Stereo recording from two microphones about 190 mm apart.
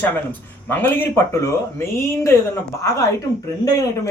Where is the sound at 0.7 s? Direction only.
10° left (ahead or behind).